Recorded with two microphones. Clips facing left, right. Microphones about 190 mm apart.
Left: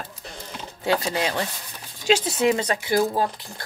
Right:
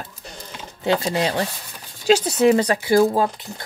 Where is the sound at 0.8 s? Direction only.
25° right (ahead or behind).